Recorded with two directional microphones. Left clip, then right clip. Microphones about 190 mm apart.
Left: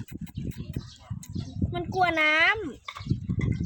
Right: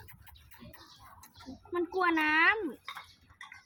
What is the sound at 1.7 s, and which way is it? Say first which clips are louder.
Speech: left 4 dB; 65° left (ahead or behind).